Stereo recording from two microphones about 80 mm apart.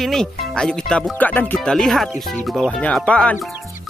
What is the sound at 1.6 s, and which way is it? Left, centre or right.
Speech, centre.